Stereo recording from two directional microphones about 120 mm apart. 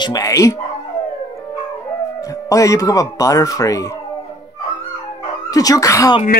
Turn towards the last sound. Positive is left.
turn(degrees=25)  # may be behind; listen again after turning